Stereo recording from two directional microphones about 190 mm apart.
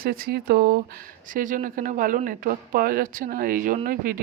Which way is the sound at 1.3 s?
45° right (ahead or behind).